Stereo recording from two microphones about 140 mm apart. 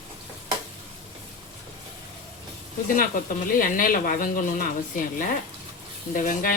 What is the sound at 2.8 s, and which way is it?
Speech, 75° left (ahead or behind).